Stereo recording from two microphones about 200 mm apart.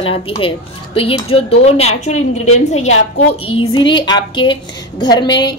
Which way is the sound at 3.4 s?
25° left (ahead or behind).